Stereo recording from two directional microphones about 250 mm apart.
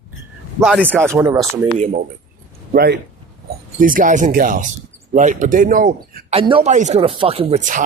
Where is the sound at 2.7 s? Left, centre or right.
Right.